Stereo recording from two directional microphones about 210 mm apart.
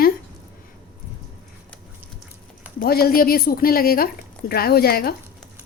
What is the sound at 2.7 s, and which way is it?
A woman's voice, 45° left (ahead or behind).